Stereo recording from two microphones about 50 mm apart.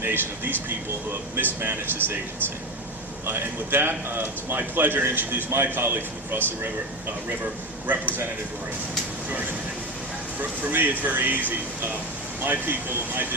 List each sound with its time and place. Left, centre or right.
0.0 s speech: right
3.2 s a man's voice: right
7.9 s speech: right
10.3 s a man's voice: right